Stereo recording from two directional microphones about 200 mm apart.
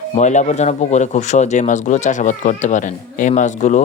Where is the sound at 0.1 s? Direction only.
35° left (ahead or behind).